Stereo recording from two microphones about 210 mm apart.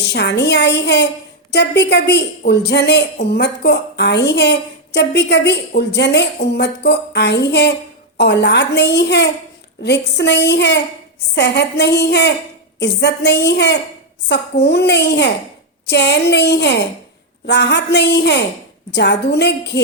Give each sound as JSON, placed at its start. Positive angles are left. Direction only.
{"t": 0.0, "sound": "a woman's voice", "side_deg": 55}